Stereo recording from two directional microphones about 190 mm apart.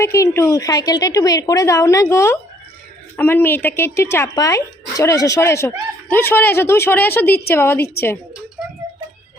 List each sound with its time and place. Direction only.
0.0 s speech: 15° left (ahead or behind)